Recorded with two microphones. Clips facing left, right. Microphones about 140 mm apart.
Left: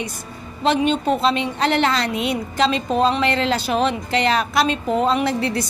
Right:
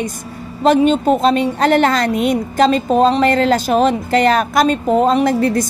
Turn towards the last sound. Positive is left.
turn(degrees=-45)  # may be behind; listen again after turning